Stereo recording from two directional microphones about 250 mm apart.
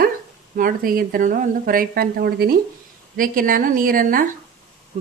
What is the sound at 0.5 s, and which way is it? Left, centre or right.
Speech, right.